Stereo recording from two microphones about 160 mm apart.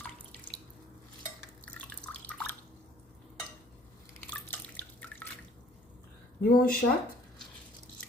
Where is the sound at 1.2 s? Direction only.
10° left (ahead or behind).